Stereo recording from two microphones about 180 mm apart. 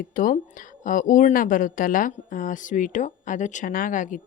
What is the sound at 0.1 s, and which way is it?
Speech, 50° left (ahead or behind).